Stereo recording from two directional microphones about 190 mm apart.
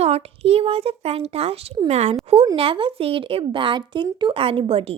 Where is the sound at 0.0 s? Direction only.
35° right (ahead or behind).